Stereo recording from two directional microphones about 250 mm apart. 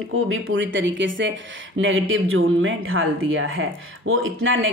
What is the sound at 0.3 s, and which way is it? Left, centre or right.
Speech, right.